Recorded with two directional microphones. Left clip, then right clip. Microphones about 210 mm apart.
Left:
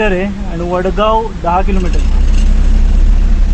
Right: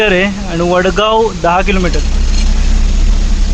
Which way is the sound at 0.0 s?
5° right (ahead or behind).